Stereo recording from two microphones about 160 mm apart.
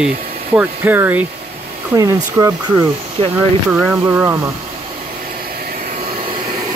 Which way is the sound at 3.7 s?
10° right (ahead or behind).